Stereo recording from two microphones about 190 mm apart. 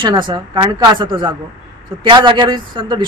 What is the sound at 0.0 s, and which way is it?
Speech, 25° right (ahead or behind).